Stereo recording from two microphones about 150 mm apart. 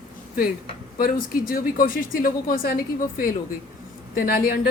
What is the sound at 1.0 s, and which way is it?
A woman's voice, 75° left (ahead or behind).